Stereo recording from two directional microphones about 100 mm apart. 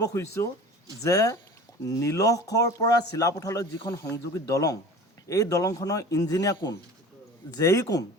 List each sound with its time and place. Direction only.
0.0 s speech: 35° left (ahead or behind)